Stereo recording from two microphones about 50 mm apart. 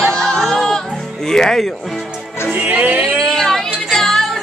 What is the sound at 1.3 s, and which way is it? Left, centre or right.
Speech, centre.